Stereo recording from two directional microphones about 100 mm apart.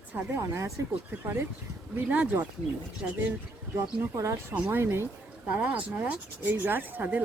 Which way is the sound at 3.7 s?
30° right (ahead or behind).